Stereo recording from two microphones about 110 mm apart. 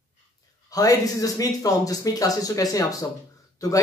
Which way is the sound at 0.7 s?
35° left (ahead or behind).